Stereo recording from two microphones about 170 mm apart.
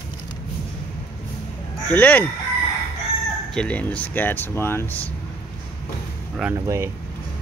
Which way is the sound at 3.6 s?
10° left (ahead or behind).